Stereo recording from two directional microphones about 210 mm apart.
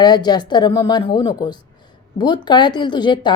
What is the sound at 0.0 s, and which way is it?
A woman's voice, 20° left (ahead or behind).